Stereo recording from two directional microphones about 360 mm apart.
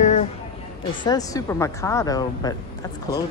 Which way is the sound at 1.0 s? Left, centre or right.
Centre.